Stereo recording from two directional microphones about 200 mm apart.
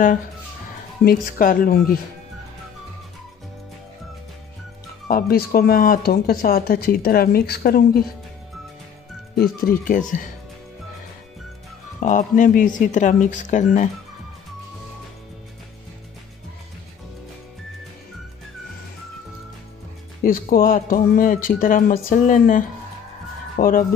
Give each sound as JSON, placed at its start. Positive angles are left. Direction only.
{"t": 1.0, "sound": "speech", "side_deg": 45}
{"t": 5.0, "sound": "speech", "side_deg": 50}
{"t": 9.4, "sound": "speech", "side_deg": 45}
{"t": 12.0, "sound": "speech", "side_deg": 40}
{"t": 20.2, "sound": "speech", "side_deg": 45}